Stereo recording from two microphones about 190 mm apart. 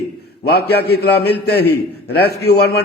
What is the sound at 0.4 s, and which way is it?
A man's voice, 55° left (ahead or behind).